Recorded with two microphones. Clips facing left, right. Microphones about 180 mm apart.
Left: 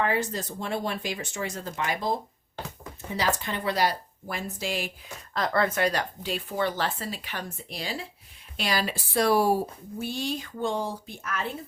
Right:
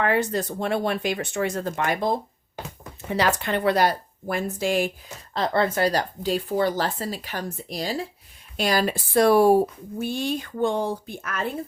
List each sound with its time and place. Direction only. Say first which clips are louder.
0.0 s speech: right 4 dB; 60° right (ahead or behind)
5.3 s speech: right 3 dB; 30° right (ahead or behind); by 11.4 s 55° right (ahead or behind)